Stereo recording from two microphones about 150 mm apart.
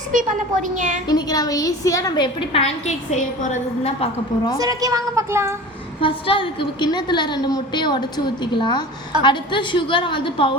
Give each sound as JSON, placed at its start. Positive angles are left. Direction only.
{"t": 0.1, "sound": "a woman's voice", "side_deg": -60}
{"t": 1.0, "sound": "a woman's voice", "side_deg": 25}
{"t": 4.5, "sound": "a woman's voice", "side_deg": -25}
{"t": 6.0, "sound": "a woman's voice", "side_deg": 35}